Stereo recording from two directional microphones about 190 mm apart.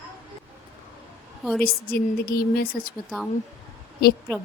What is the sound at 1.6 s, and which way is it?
Speech, 55° left (ahead or behind).